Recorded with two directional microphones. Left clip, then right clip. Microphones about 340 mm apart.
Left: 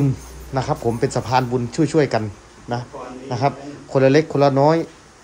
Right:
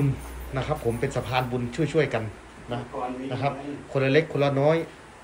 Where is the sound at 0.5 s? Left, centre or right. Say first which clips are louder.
Left 6 dB; centre.